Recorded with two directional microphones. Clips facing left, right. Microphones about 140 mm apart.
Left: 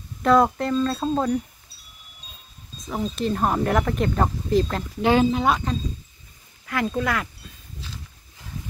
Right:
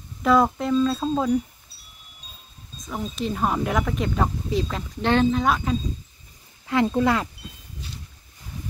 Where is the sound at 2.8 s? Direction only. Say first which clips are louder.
Left 3 dB; centre (ahead or behind).